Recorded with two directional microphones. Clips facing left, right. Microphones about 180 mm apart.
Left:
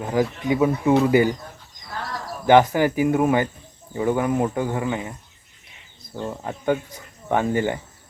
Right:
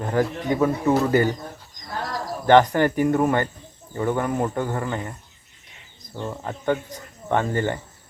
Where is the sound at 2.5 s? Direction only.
10° left (ahead or behind).